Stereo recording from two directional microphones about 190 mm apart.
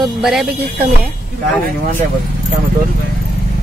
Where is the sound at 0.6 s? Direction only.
55° right (ahead or behind).